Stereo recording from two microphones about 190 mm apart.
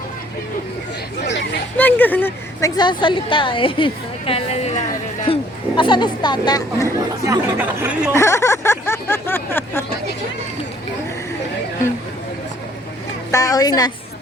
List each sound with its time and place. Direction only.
1.8 s a woman's voice: 10° left (ahead or behind)
7.3 s speech: 10° right (ahead or behind)
8.1 s a sound: 15° left (ahead or behind)
13.3 s a woman's voice: 20° left (ahead or behind)